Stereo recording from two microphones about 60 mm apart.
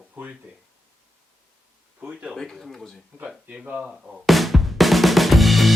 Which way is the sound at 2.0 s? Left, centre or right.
Right.